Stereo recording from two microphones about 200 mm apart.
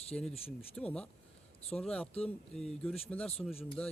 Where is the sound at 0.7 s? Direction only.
5° left (ahead or behind).